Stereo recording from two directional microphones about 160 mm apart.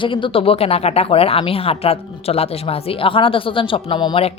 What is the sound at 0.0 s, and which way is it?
Speech, 30° left (ahead or behind).